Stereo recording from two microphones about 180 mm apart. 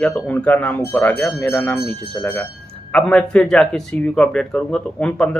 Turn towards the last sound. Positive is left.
turn(degrees=5)  # may be behind; listen again after turning